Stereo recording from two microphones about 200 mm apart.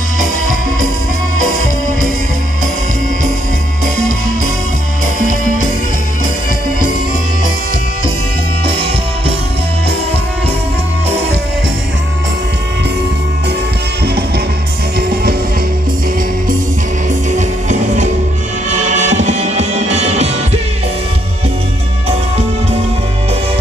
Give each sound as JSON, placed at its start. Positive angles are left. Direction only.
{"t": 15.0, "sound": "music", "side_deg": -50}
{"t": 17.4, "sound": "music", "side_deg": -40}